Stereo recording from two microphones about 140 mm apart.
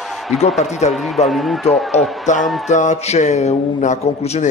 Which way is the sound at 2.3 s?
60° left (ahead or behind).